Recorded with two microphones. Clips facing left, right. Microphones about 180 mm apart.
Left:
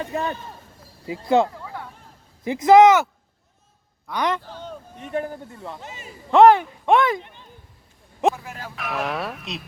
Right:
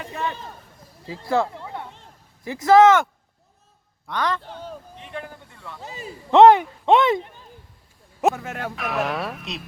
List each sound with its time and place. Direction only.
0.0 s speech: 40° left (ahead or behind)
1.0 s speech: 20° left (ahead or behind)
1.5 s a sound: 25° right (ahead or behind)
2.4 s speech: 20° left (ahead or behind)
4.1 s a man's voice: 20° left (ahead or behind)
4.9 s a man's voice: 45° left (ahead or behind)
5.5 s speech: 25° left (ahead or behind)
5.8 s a man's voice: 35° right (ahead or behind)
6.3 s speech: 20° right (ahead or behind)
8.4 s speech: 65° right (ahead or behind)
8.7 s speech: centre (ahead or behind)